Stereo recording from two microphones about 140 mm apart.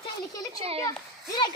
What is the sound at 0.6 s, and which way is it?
Speech, 40° right (ahead or behind).